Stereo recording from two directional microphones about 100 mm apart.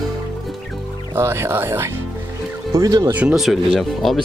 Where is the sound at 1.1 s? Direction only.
25° right (ahead or behind).